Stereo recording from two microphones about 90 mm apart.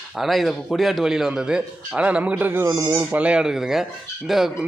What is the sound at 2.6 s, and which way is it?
Speech, 40° right (ahead or behind).